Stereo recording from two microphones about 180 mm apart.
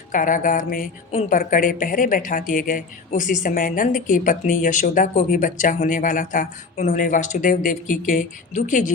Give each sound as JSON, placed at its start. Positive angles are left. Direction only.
{"t": 0.1, "sound": "a woman's voice", "side_deg": 50}